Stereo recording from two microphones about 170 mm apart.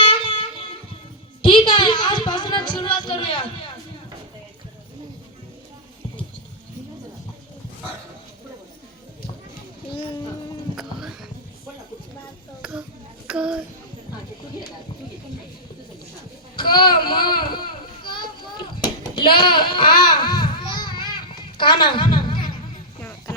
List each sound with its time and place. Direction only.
0.0 s music: 30° left (ahead or behind)
10.8 s music: 5° right (ahead or behind)
13.2 s child singing: 5° right (ahead or behind)
16.6 s a sound: 25° left (ahead or behind)
19.5 s baby cry: 30° left (ahead or behind)
21.8 s speech: 30° left (ahead or behind)